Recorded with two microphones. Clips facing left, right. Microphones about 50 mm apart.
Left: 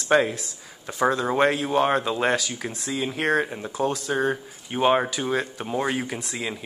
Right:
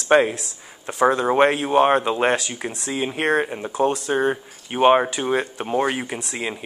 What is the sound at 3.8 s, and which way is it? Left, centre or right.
Speech, right.